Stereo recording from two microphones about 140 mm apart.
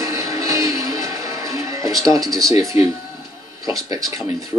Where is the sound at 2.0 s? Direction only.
25° right (ahead or behind).